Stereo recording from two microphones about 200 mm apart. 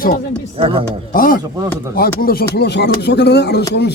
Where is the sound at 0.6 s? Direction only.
25° right (ahead or behind).